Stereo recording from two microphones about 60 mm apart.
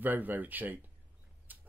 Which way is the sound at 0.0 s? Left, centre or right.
Right.